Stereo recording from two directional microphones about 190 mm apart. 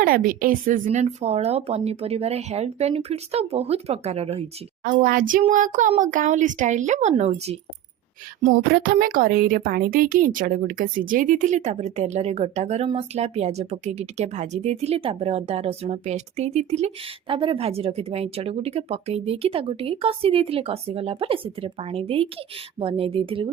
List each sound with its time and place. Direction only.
0.0 s speech: 50° right (ahead or behind); by 4.4 s 30° right (ahead or behind)
4.8 s child singing: 45° right (ahead or behind)
5.9 s speech: 40° right (ahead or behind)
8.7 s speech: 50° right (ahead or behind); by 23.5 s 30° right (ahead or behind)